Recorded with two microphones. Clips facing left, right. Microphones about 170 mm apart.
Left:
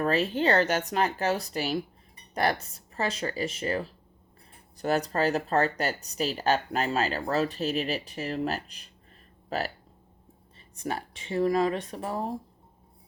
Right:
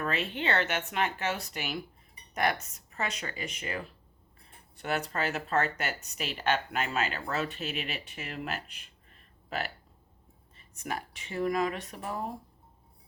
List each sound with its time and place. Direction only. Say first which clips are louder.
0.0 s speech: left 7 dB; 35° left (ahead or behind)
10.8 s speech: left 4 dB; 30° left (ahead or behind)